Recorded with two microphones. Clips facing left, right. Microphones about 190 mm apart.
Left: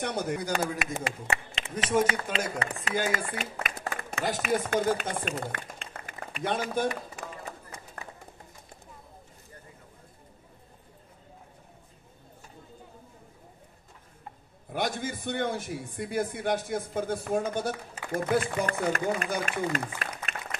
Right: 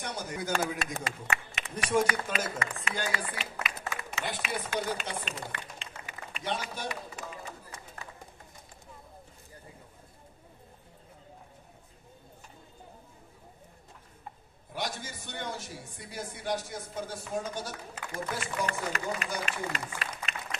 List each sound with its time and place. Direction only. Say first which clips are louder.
0.0 s a man's voice: left 7 dB; 60° left (ahead or behind)
0.5 s speech: left 2 dB; 15° left (ahead or behind)
1.0 s speech: left 3 dB; 30° left (ahead or behind)
3.1 s speech: left 4 dB; 45° left (ahead or behind)
6.4 s run: left 7 dB; 50° left (ahead or behind)
14.7 s a man's voice: left 6 dB; 55° left (ahead or behind)